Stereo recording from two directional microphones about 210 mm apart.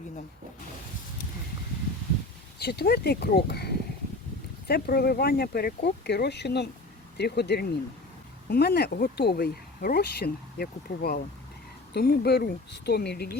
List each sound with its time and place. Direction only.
2.6 s speech: 50° left (ahead or behind)
4.7 s speech: 45° left (ahead or behind)